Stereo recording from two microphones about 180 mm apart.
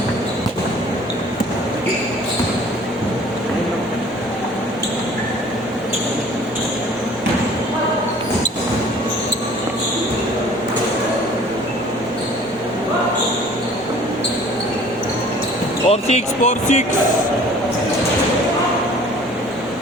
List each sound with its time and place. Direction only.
15.9 s speech: 35° left (ahead or behind)